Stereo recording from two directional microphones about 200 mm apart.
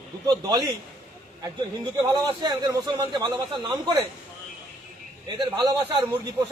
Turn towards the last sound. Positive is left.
turn(degrees=-20)  # may be behind; listen again after turning